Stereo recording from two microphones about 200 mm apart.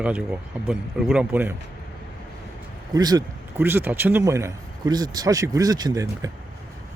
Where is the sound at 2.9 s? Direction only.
20° right (ahead or behind).